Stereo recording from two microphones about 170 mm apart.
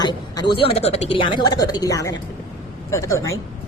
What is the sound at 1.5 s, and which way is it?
A woman's voice, 20° left (ahead or behind).